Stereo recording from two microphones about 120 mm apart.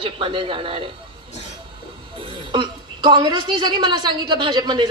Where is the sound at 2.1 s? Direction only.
45° right (ahead or behind).